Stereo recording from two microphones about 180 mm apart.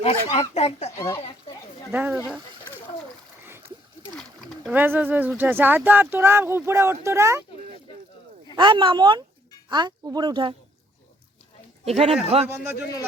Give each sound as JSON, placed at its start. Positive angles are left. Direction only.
{"t": 0.0, "sound": "speech", "side_deg": 35}
{"t": 0.9, "sound": "speech", "side_deg": 15}
{"t": 1.9, "sound": "speech", "side_deg": -5}
{"t": 4.1, "sound": "a sound", "side_deg": 0}
{"t": 4.8, "sound": "speech", "side_deg": -10}
{"t": 8.5, "sound": "speech", "side_deg": -25}
{"t": 11.9, "sound": "speech", "side_deg": -35}